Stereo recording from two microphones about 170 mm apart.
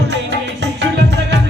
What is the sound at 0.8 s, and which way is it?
Music, 90° right.